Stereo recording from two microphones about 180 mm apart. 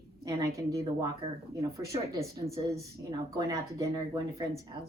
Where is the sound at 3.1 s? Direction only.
20° right (ahead or behind).